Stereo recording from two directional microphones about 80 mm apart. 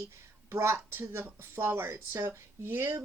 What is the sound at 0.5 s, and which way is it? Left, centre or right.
Speech, right.